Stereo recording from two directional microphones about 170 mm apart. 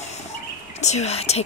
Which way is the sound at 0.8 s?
40° left (ahead or behind).